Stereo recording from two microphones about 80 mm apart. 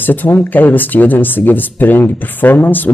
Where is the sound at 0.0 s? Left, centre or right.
Left.